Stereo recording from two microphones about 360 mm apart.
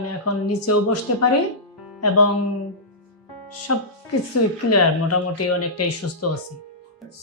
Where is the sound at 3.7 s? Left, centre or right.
Left.